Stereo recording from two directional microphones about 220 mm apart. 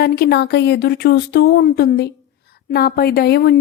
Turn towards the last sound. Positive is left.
turn(degrees=45)  # may be behind; listen again after turning